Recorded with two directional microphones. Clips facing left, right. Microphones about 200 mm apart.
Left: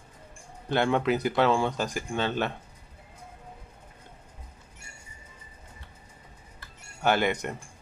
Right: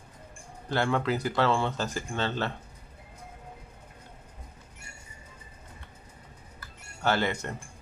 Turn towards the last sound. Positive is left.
turn(degrees=15)  # may be behind; listen again after turning